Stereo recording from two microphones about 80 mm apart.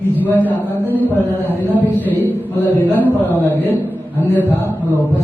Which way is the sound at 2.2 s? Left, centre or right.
Left.